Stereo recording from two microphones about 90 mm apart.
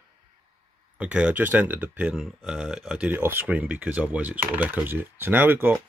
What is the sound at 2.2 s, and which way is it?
Speech, 5° right (ahead or behind).